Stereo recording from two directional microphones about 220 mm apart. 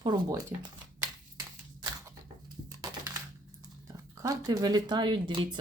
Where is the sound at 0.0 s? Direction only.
20° right (ahead or behind).